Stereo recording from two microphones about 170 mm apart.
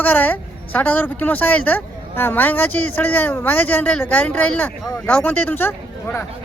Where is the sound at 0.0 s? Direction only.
10° left (ahead or behind).